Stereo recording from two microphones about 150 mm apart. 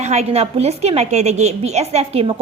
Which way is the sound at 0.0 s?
45° right (ahead or behind).